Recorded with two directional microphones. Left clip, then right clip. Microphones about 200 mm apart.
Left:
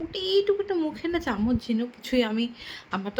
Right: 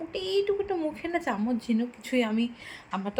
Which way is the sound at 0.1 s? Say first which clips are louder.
Left 4 dB; 15° left (ahead or behind).